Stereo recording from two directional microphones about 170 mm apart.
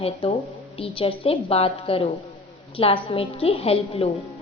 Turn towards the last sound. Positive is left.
turn(degrees=35)  # may be behind; listen again after turning